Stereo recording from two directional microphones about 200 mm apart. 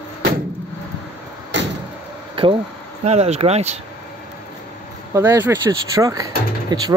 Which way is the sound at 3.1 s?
30° right (ahead or behind).